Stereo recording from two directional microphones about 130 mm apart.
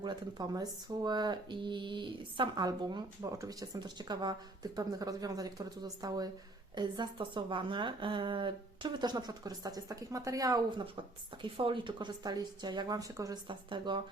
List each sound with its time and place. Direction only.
0.0 s speech: 35° right (ahead or behind)
11.4 s speech: 40° right (ahead or behind); by 13.4 s 25° right (ahead or behind)
13.5 s speech: 40° right (ahead or behind)